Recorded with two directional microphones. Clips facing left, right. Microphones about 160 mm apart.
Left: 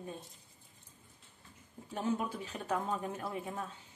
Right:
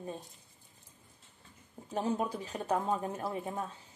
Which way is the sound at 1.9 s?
35° right (ahead or behind).